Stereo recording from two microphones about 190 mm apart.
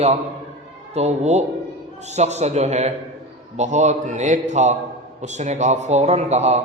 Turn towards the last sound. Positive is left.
turn(degrees=-35)  # may be behind; listen again after turning